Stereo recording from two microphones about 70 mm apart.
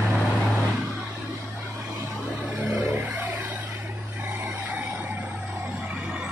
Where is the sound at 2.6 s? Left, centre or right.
Right.